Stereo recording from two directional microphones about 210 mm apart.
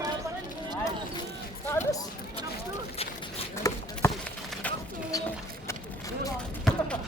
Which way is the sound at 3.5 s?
15° left (ahead or behind).